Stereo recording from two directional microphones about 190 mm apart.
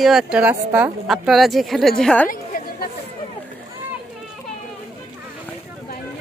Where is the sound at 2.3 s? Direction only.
45° left (ahead or behind).